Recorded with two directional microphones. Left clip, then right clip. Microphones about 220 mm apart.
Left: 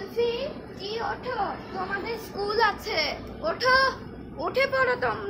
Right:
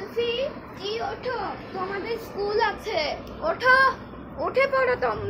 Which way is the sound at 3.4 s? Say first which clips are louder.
Right 3 dB; 5° left (ahead or behind).